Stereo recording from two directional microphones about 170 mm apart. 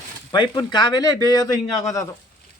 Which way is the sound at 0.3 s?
25° left (ahead or behind).